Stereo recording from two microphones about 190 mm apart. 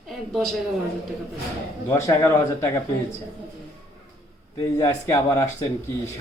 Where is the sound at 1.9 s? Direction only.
15° left (ahead or behind).